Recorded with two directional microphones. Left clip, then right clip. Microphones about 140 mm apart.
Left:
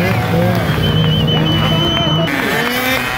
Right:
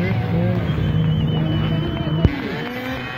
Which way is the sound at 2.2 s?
10° left (ahead or behind).